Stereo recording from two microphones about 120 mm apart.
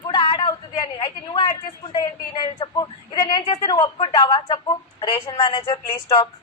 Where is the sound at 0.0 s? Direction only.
40° left (ahead or behind).